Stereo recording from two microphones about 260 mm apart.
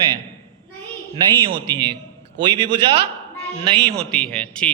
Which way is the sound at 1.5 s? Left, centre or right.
Centre.